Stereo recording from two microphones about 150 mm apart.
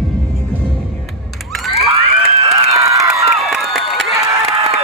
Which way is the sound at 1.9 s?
40° right (ahead or behind).